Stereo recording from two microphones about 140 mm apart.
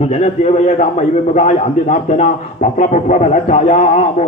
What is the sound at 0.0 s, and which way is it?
A man's voice, 50° left (ahead or behind).